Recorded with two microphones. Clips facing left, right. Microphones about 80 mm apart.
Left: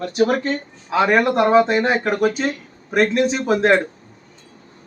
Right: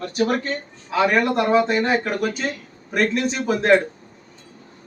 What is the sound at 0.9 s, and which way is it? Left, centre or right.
Speech, centre.